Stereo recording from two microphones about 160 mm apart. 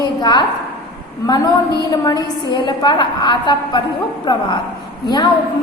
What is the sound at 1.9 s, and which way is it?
A woman's voice, 25° left (ahead or behind).